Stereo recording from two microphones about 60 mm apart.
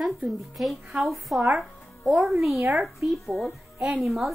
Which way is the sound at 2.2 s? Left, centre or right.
Centre.